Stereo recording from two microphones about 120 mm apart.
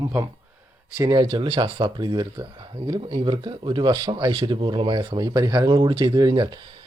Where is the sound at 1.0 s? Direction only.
30° right (ahead or behind).